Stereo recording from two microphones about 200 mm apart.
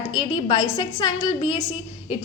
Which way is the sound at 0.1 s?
25° left (ahead or behind).